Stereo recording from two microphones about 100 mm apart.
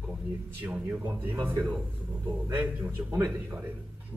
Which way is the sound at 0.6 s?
20° right (ahead or behind).